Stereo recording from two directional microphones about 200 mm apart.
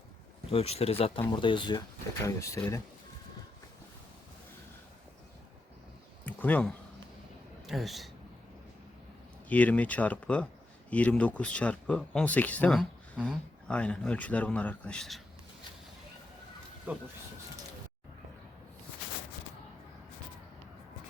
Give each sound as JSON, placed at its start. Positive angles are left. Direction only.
{"t": 0.5, "sound": "speech", "side_deg": 30}
{"t": 6.2, "sound": "a sound", "side_deg": 10}
{"t": 7.7, "sound": "a man's voice", "side_deg": 0}
{"t": 9.5, "sound": "speech", "side_deg": 5}
{"t": 16.9, "sound": "speech", "side_deg": -10}